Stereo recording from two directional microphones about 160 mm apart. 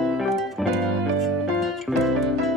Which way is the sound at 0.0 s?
Centre (ahead or behind).